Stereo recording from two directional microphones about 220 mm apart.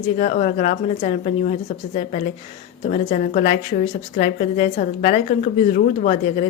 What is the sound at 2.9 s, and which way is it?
A woman's voice, 35° left (ahead or behind).